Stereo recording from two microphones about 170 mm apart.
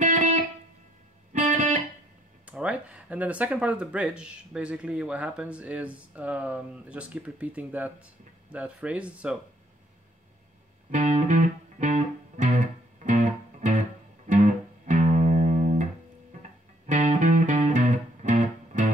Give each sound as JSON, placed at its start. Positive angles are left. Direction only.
{"t": 0.0, "sound": "music", "side_deg": -45}
{"t": 2.4, "sound": "speech", "side_deg": -5}
{"t": 10.9, "sound": "music", "side_deg": -45}